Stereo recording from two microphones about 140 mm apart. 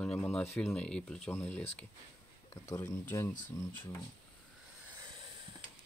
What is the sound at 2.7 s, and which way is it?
Speech, 20° left (ahead or behind).